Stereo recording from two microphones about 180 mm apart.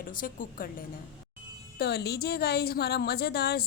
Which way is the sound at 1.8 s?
60° left (ahead or behind).